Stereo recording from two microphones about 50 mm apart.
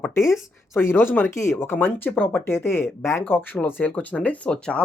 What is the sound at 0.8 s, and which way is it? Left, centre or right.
Speech, left.